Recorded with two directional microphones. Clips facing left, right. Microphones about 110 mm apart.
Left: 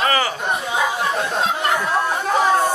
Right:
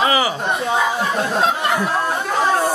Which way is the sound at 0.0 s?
15° right (ahead or behind).